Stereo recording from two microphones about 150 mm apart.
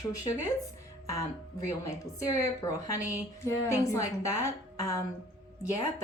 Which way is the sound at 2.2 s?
20° left (ahead or behind).